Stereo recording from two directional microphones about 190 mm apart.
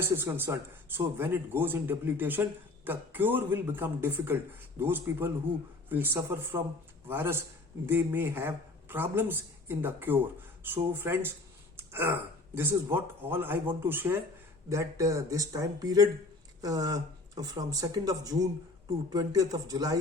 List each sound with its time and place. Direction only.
0.2 s a man's voice: 10° right (ahead or behind)
11.8 s a sound: 10° right (ahead or behind)
12.5 s a man's voice: 10° right (ahead or behind)